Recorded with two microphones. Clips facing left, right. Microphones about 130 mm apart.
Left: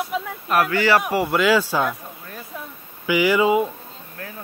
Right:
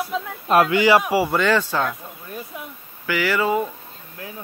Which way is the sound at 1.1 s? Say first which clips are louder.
Even; centre (ahead or behind).